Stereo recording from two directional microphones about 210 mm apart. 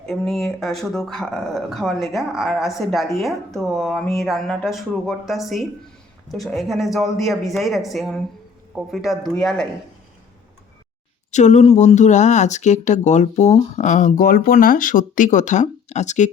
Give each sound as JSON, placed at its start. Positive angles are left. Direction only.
{"t": 0.0, "sound": "speech", "side_deg": 0}
{"t": 11.3, "sound": "speech", "side_deg": 35}